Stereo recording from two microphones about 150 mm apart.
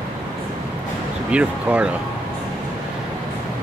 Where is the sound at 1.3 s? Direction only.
10° right (ahead or behind).